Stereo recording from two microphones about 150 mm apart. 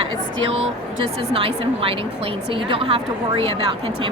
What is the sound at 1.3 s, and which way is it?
Speech, 40° right (ahead or behind).